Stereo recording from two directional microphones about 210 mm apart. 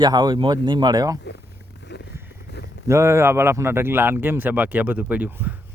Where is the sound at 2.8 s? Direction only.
15° right (ahead or behind).